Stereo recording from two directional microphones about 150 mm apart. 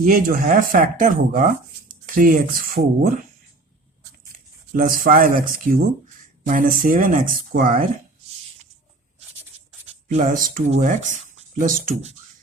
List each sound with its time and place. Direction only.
0.0 s speech: 70° right (ahead or behind)
4.7 s speech: 65° right (ahead or behind)
10.1 s speech: 60° right (ahead or behind)